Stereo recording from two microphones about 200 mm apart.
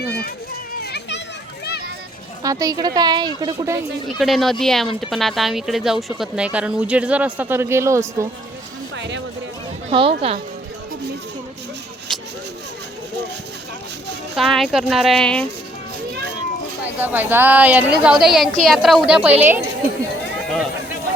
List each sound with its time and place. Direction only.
0.0 s children playing: 55° left (ahead or behind)
2.4 s speech: 15° right (ahead or behind)
4.2 s speech: centre (ahead or behind)
9.0 s music: 65° right (ahead or behind)
9.9 s speech: 25° right (ahead or behind)
14.3 s speech: centre (ahead or behind)
17.0 s speech: 10° right (ahead or behind)